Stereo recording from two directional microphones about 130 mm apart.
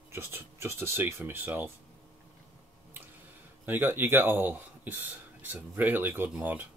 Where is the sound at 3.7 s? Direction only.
15° right (ahead or behind).